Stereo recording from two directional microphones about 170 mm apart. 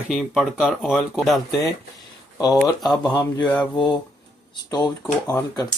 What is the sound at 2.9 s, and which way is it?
Speech, 25° left (ahead or behind).